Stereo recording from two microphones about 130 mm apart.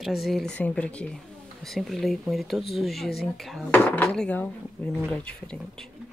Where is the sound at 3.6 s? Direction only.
10° left (ahead or behind).